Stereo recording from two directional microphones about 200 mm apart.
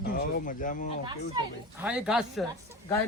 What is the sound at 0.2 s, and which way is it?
Speech, 40° left (ahead or behind).